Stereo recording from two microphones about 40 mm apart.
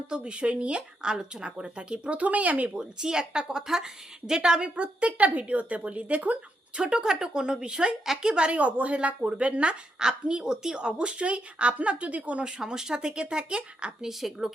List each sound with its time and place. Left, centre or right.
0.1 s a woman's voice: right
2.7 s a woman's voice: right
4.7 s speech: right
6.7 s a woman's voice: right
8.0 s a woman's voice: centre
8.3 s a woman's voice: right
14.0 s a woman's voice: centre